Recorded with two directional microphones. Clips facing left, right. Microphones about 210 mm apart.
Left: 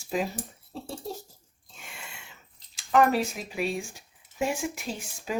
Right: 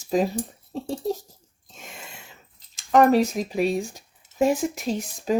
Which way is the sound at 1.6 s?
40° right (ahead or behind).